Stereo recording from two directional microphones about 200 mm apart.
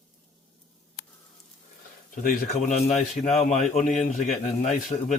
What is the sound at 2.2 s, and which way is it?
Speech, 35° left (ahead or behind).